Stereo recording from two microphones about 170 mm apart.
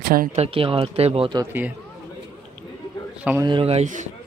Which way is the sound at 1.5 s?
10° right (ahead or behind).